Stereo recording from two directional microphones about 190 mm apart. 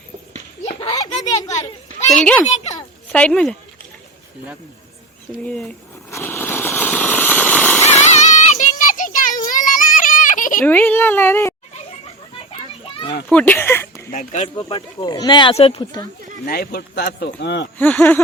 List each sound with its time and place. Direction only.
0.6 s a sound: 30° left (ahead or behind)
0.9 s a sound: 20° left (ahead or behind)
2.1 s a child's voice: 5° left (ahead or behind)
2.5 s a child's voice: 35° left (ahead or behind)
3.1 s speech: 5° left (ahead or behind)
5.5 s a sound: 5° left (ahead or behind)
8.2 s child singing: 40° left (ahead or behind)
10.6 s speech: 10° left (ahead or behind)
13.2 s speech: 10° left (ahead or behind)
14.1 s a child's voice: 40° left (ahead or behind)
15.0 s speech: 20° left (ahead or behind)
16.5 s speech: 55° left (ahead or behind)
17.7 s speech: 10° left (ahead or behind)